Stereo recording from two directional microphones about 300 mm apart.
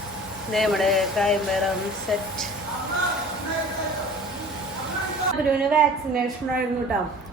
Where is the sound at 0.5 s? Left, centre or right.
Centre.